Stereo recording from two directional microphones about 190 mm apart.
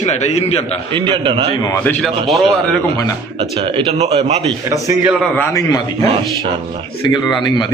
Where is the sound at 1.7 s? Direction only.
10° left (ahead or behind).